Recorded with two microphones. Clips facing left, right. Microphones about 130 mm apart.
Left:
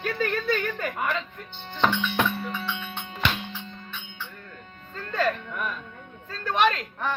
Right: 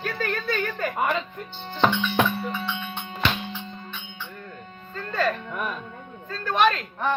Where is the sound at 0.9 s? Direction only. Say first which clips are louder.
Right 6 dB; 25° right (ahead or behind).